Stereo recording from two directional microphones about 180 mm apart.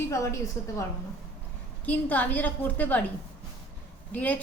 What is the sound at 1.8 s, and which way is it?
A woman's voice, 10° left (ahead or behind).